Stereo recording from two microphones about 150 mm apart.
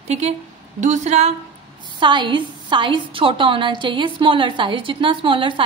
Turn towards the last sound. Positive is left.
turn(degrees=-35)  # may be behind; listen again after turning